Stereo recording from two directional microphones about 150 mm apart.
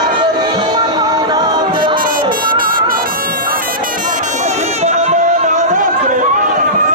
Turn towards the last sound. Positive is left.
turn(degrees=-60)  # may be behind; listen again after turning